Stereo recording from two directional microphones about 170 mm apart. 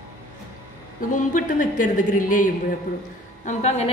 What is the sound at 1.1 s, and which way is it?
A woman's voice, 50° left (ahead or behind).